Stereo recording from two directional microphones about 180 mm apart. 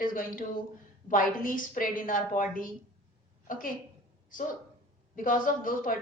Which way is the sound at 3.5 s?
50° left (ahead or behind).